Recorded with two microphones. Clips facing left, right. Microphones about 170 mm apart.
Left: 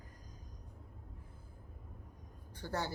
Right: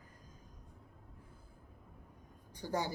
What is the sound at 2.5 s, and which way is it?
Speech, 15° right (ahead or behind).